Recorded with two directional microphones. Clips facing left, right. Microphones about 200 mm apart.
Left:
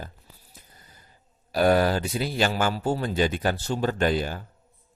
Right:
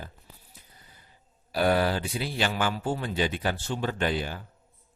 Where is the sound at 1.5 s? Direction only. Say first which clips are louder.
Left 4 dB; 45° left (ahead or behind).